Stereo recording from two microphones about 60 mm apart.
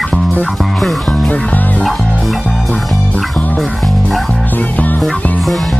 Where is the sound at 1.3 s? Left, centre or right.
Left.